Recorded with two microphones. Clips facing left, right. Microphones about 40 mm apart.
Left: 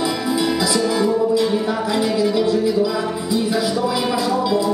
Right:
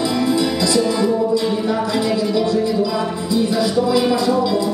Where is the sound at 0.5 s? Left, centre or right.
Centre.